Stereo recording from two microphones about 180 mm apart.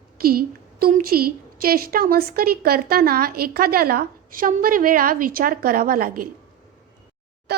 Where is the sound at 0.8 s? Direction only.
55° right (ahead or behind).